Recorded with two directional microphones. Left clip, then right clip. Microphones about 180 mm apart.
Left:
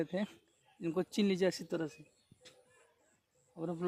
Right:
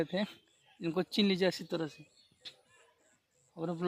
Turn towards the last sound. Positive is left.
turn(degrees=-40)  # may be behind; listen again after turning